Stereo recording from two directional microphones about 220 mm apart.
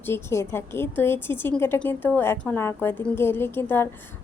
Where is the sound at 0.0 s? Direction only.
10° left (ahead or behind).